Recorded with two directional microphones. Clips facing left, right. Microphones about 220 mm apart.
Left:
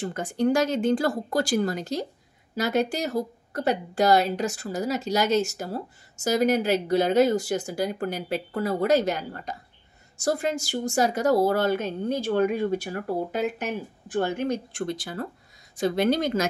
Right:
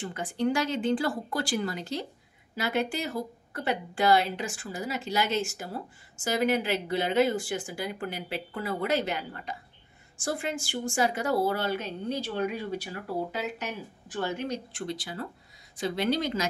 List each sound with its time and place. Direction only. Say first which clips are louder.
0.0 s a woman's voice: left 4 dB; 40° left (ahead or behind)